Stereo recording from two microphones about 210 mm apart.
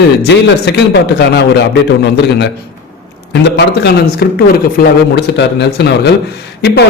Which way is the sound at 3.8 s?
45° left (ahead or behind).